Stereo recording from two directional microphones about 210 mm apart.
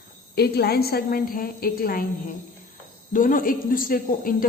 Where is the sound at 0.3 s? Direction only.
50° left (ahead or behind).